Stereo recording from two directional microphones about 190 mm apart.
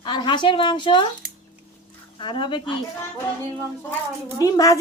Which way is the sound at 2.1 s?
25° left (ahead or behind).